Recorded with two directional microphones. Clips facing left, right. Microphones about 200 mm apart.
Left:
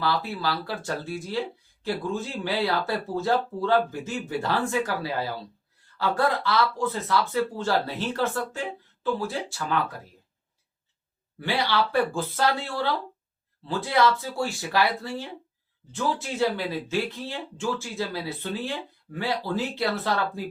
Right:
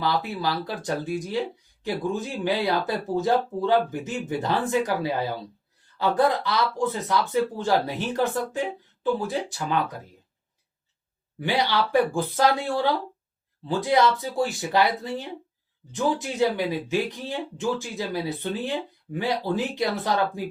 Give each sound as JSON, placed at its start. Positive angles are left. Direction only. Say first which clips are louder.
{"t": 0.0, "sound": "speech", "louder": "right 1 dB", "side_deg": -20}
{"t": 11.3, "sound": "speech", "louder": "right 1 dB", "side_deg": -15}